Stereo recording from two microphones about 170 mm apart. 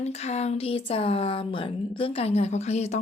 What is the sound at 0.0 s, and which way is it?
Speech, 40° left (ahead or behind).